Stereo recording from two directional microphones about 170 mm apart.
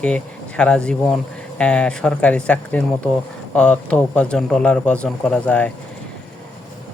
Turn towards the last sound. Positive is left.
turn(degrees=5)  # may be behind; listen again after turning